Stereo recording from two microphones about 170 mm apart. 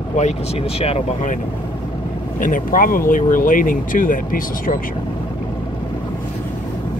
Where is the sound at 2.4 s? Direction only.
55° left (ahead or behind).